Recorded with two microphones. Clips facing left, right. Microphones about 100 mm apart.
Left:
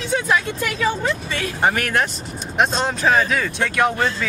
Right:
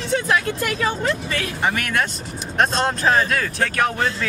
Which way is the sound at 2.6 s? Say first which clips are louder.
Even; centre (ahead or behind).